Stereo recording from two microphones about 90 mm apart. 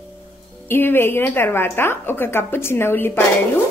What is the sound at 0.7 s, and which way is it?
A woman's voice, 25° left (ahead or behind).